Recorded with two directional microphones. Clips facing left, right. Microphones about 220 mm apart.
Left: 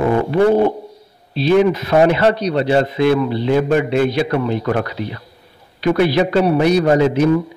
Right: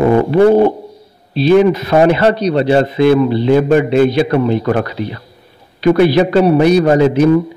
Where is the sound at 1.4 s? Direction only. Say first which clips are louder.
Right 4 dB; 40° right (ahead or behind).